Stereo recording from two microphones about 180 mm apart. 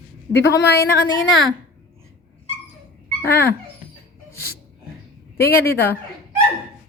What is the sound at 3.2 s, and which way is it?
Speech, 10° left (ahead or behind).